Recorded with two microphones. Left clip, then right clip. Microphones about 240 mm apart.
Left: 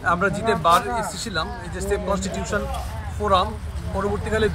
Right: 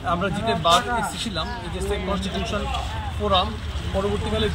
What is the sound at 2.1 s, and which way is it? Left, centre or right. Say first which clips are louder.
Speech: left 2 dB; centre.